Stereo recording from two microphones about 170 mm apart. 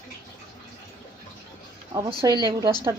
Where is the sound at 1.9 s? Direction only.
25° right (ahead or behind).